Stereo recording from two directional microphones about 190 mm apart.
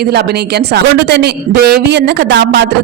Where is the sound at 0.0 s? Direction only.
60° right (ahead or behind).